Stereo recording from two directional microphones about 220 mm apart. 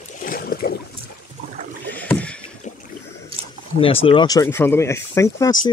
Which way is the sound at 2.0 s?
5° left (ahead or behind).